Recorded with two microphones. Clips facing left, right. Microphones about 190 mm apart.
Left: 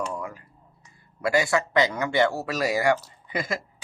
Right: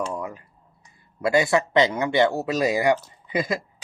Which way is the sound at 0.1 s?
20° right (ahead or behind).